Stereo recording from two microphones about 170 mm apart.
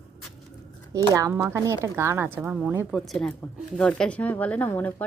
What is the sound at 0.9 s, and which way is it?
A woman's voice, 20° right (ahead or behind).